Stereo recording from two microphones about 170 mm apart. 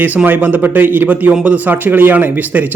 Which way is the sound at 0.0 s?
10° right (ahead or behind).